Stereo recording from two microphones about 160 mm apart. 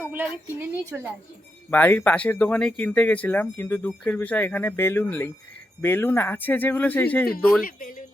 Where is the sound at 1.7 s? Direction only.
15° left (ahead or behind).